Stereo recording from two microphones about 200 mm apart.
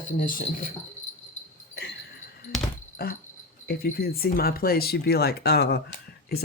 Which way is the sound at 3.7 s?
50° left (ahead or behind).